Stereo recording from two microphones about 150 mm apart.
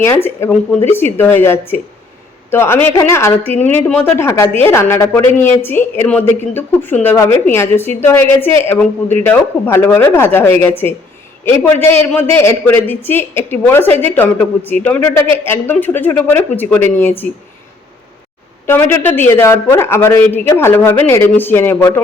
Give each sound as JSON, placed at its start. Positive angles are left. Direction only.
{"t": 0.0, "sound": "a man's voice", "side_deg": 15}
{"t": 18.6, "sound": "a man's voice", "side_deg": 15}